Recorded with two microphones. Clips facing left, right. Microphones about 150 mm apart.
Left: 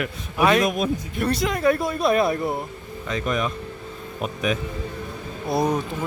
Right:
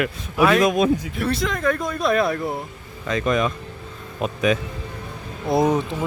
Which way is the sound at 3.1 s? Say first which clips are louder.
Right 4 dB; 85° right.